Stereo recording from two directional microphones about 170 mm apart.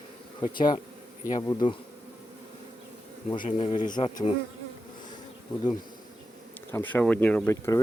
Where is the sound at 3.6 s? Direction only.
40° left (ahead or behind).